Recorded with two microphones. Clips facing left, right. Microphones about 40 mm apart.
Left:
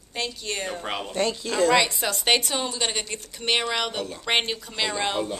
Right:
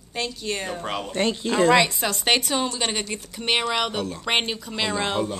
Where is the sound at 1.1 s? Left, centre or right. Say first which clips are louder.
Right 3 dB; right.